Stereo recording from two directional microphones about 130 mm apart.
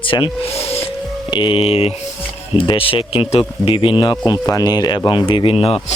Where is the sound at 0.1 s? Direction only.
45° left (ahead or behind).